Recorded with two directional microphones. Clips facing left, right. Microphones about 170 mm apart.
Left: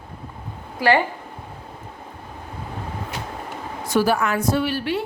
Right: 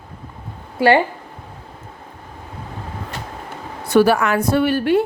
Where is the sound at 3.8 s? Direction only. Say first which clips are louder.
Right 5 dB; 65° right (ahead or behind).